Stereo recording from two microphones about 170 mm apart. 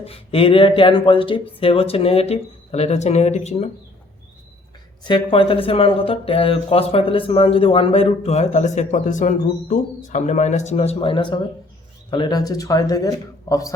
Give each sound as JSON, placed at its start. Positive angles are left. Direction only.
{"t": 0.0, "sound": "speech", "side_deg": 35}
{"t": 5.0, "sound": "a man's voice", "side_deg": 30}